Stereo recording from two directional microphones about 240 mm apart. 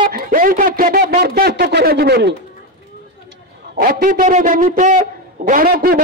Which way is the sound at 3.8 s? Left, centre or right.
Right.